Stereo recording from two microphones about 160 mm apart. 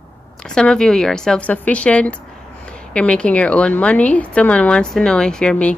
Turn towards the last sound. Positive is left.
turn(degrees=5)  # may be behind; listen again after turning